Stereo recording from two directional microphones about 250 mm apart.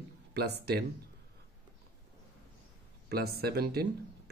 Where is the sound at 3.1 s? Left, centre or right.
Right.